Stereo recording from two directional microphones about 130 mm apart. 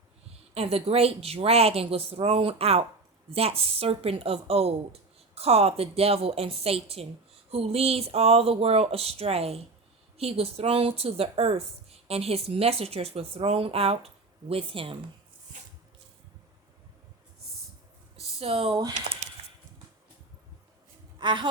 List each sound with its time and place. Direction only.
0.5 s a woman's voice: 50° right (ahead or behind)
18.2 s a sound: 50° right (ahead or behind)
21.2 s a woman's voice: 35° right (ahead or behind)